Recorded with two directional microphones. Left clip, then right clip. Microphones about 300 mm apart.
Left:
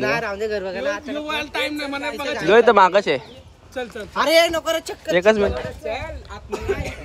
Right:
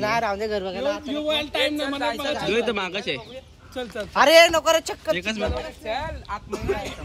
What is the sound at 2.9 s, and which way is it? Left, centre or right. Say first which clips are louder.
Speech: left 10 dB; centre.